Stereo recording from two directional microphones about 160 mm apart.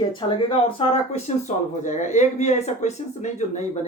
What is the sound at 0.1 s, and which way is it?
Speech, 30° left (ahead or behind).